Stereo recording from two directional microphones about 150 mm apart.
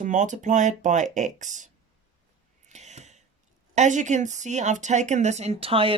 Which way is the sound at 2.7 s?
50° right (ahead or behind).